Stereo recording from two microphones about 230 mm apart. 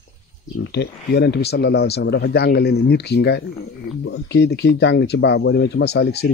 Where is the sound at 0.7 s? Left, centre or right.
Left.